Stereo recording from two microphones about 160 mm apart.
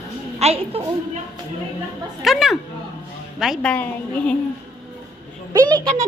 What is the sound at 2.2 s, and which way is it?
A woman's voice, centre (ahead or behind).